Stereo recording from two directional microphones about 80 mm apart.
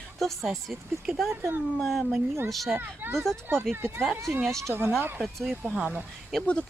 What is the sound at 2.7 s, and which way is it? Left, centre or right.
Speech, right.